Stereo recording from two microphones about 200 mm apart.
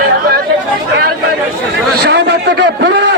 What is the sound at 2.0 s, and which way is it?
A man's voice, 55° right (ahead or behind).